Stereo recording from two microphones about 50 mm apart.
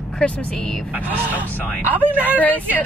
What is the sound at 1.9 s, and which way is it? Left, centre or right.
Speech, right.